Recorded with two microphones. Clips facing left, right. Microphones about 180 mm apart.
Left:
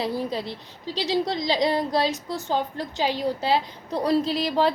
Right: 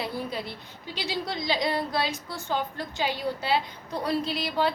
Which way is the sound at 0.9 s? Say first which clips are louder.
Left 7 dB; 35° left (ahead or behind).